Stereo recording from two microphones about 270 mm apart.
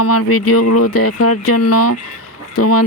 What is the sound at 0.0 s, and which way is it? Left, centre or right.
Speech, left.